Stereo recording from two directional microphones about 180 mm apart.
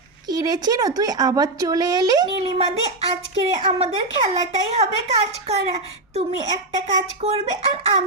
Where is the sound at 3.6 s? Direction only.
35° right (ahead or behind).